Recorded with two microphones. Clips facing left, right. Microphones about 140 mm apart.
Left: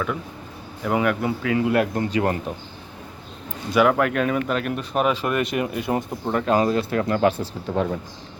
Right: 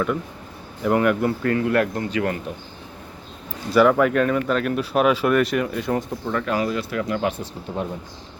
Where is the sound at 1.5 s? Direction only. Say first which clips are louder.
Left 2 dB; 20° left (ahead or behind).